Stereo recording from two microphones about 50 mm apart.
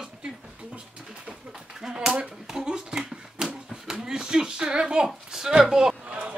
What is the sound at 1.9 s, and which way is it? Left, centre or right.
Speech, right.